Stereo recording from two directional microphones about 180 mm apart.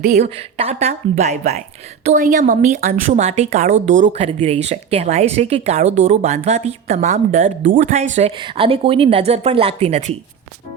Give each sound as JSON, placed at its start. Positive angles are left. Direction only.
{"t": 0.0, "sound": "speech", "side_deg": -40}
{"t": 4.0, "sound": "speech", "side_deg": -35}
{"t": 8.4, "sound": "speech", "side_deg": -30}